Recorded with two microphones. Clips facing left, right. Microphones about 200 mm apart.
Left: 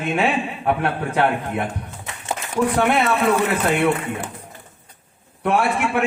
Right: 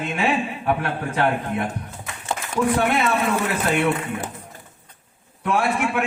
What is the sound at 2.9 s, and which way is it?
Speech, 55° left (ahead or behind).